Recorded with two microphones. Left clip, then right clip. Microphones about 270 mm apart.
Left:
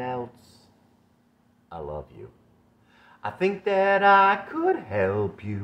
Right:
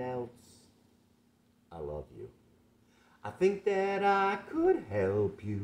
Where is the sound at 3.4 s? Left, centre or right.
Centre.